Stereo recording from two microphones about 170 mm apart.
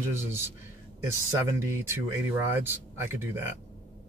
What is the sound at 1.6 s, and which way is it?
Speech, 15° right (ahead or behind).